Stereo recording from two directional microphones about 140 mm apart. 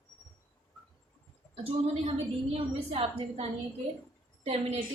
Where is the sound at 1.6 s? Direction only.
45° right (ahead or behind).